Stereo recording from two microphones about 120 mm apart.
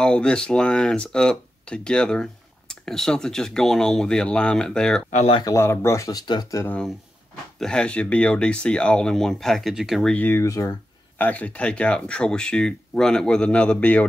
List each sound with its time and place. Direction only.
0.0 s speech: 10° left (ahead or behind)
5.4 s speech: 25° left (ahead or behind)
7.6 s speech: 10° left (ahead or behind)
10.1 s speech: 20° left (ahead or behind)
11.1 s speech: 15° left (ahead or behind)